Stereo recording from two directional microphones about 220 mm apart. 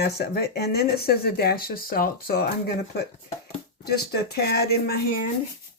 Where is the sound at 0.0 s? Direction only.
45° left (ahead or behind).